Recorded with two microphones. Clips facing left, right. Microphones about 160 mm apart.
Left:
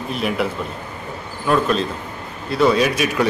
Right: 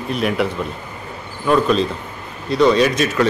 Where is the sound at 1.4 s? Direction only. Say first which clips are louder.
Right 3 dB; centre (ahead or behind).